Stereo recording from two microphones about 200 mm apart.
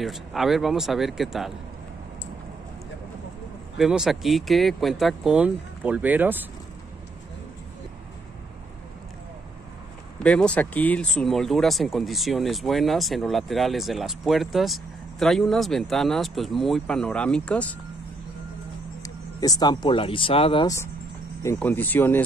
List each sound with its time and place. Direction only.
0.0 s speech: centre (ahead or behind)
3.7 s speech: centre (ahead or behind)
10.1 s speech: 5° left (ahead or behind)
19.0 s speech: 20° left (ahead or behind)
20.6 s speech: 15° left (ahead or behind)